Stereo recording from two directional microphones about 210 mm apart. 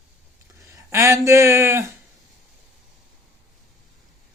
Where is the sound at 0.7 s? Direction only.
15° right (ahead or behind).